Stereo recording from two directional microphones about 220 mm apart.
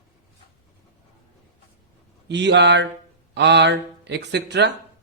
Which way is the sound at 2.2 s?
50° right (ahead or behind).